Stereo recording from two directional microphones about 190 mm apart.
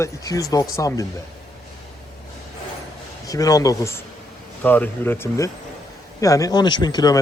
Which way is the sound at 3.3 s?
20° left (ahead or behind).